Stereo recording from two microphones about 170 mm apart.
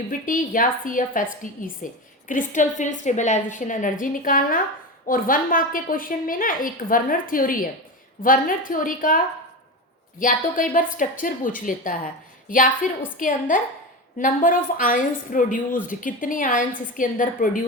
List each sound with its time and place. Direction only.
0.1 s a woman's voice: 50° left (ahead or behind)